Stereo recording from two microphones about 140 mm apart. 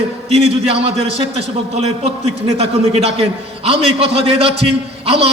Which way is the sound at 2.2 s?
50° right (ahead or behind).